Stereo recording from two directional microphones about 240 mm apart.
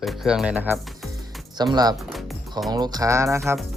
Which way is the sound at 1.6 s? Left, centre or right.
Centre.